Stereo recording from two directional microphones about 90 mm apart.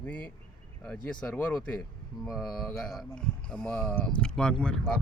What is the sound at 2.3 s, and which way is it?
Speech, centre (ahead or behind).